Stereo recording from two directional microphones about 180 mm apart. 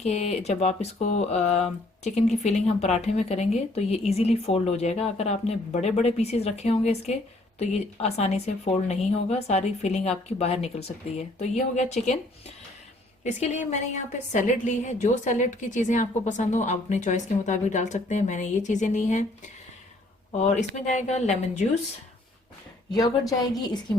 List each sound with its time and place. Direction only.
0.0 s speech: 40° left (ahead or behind)
13.2 s speech: 40° left (ahead or behind)
21.1 s speech: 40° left (ahead or behind)
23.0 s a woman's voice: 20° left (ahead or behind)